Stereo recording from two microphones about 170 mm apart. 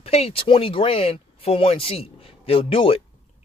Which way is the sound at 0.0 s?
35° left (ahead or behind).